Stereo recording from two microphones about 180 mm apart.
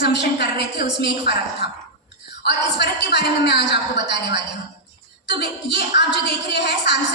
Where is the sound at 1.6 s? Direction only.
65° left (ahead or behind).